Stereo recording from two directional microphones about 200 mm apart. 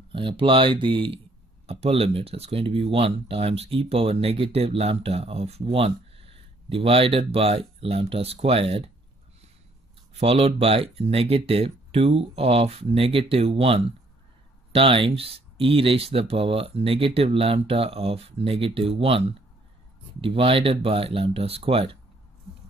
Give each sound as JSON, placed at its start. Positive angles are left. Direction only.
{"t": 0.1, "sound": "speech", "side_deg": -25}
{"t": 10.1, "sound": "speech", "side_deg": -30}